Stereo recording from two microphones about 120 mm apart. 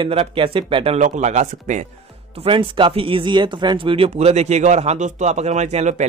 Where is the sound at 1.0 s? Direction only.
80° right.